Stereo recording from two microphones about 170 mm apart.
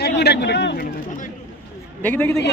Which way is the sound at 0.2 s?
80° left.